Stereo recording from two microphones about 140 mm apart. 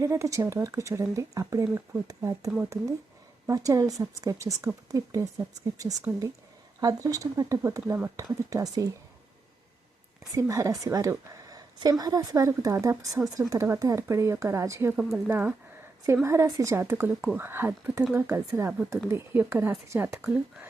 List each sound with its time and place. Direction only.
0.0 s a woman's voice: 20° right (ahead or behind)
5.8 s speech: 10° right (ahead or behind)
6.7 s a woman's voice: 25° right (ahead or behind)
10.3 s a woman's voice: 20° right (ahead or behind)